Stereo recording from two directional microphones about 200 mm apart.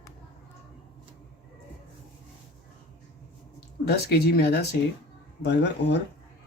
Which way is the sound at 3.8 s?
55° left (ahead or behind).